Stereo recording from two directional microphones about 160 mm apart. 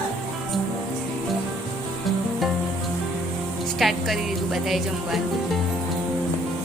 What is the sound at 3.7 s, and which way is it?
Music, centre (ahead or behind).